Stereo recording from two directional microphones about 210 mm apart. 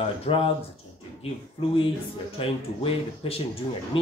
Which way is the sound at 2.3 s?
25° left (ahead or behind).